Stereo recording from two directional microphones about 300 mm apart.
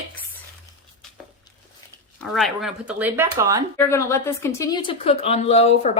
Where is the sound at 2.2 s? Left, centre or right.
Centre.